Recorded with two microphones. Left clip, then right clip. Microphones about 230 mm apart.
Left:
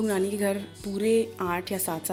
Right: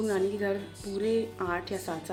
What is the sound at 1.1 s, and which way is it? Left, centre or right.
Speech, left.